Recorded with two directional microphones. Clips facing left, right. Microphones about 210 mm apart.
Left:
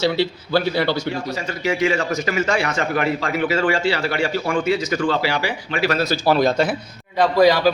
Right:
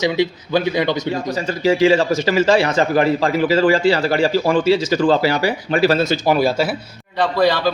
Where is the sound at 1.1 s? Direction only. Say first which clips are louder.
Right 4 dB; 40° right (ahead or behind).